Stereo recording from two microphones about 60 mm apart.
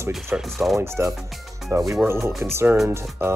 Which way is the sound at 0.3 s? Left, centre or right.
Right.